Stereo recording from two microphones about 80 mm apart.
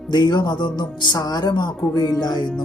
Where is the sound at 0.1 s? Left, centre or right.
Left.